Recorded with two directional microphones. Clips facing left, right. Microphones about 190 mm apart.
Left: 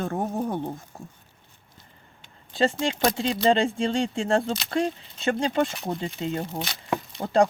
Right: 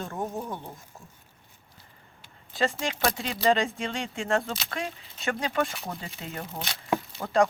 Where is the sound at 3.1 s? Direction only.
30° left (ahead or behind).